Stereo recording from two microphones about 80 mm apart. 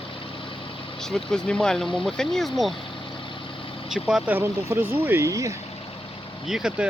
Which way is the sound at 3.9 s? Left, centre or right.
Centre.